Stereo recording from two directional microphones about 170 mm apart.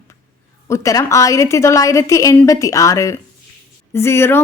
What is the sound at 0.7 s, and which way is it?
A woman's voice, 20° left (ahead or behind).